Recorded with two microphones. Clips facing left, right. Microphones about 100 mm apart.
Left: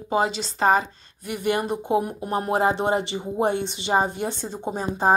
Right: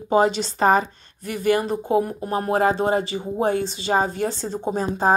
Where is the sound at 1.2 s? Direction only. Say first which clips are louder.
Right 3 dB; 15° left (ahead or behind).